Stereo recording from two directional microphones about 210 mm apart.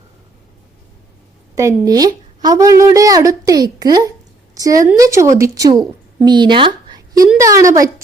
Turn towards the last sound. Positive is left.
turn(degrees=-15)  # may be behind; listen again after turning